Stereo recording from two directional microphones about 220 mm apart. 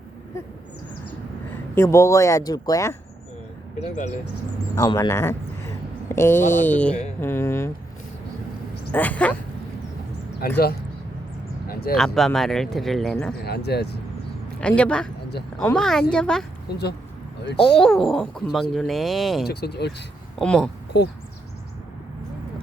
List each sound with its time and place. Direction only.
1.7 s speech: 10° left (ahead or behind)
4.7 s a sound: 15° left (ahead or behind)
6.5 s speech: 10° left (ahead or behind)
8.9 s speech: 10° left (ahead or behind)
10.4 s speech: 45° left (ahead or behind)
11.7 s a sound: 40° left (ahead or behind)
11.9 s speech: centre (ahead or behind)
13.4 s speech: 45° left (ahead or behind)
14.6 s speech: 5° left (ahead or behind)
16.6 s speech: 50° left (ahead or behind)
17.6 s speech: centre (ahead or behind)
19.5 s speech: 45° left (ahead or behind)
20.4 s speech: 5° left (ahead or behind)
20.9 s speech: 50° left (ahead or behind)